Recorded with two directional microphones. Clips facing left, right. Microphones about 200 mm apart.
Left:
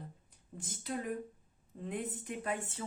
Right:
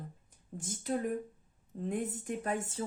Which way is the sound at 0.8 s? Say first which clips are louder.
Right 4 dB; 45° right (ahead or behind).